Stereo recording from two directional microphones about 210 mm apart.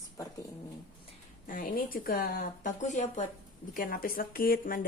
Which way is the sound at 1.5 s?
45° left (ahead or behind).